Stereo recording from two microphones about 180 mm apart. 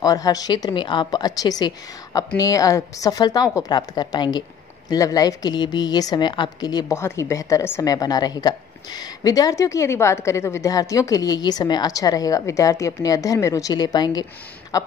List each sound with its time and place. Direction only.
0.0 s a woman's voice: 20° left (ahead or behind)